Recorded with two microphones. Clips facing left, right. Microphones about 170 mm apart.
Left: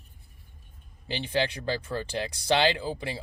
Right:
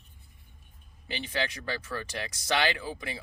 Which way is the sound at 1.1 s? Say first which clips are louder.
Left 5 dB; 30° left (ahead or behind).